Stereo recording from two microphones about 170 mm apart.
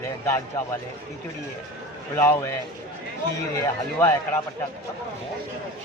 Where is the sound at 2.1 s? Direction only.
15° left (ahead or behind).